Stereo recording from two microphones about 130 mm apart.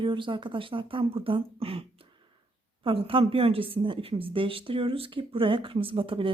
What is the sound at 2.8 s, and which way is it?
Speech, 45° right (ahead or behind).